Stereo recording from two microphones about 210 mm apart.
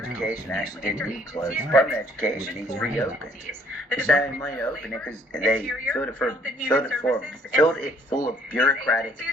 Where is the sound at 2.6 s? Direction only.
15° left (ahead or behind).